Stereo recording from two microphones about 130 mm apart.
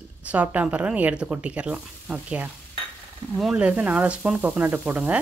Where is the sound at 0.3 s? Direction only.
10° right (ahead or behind).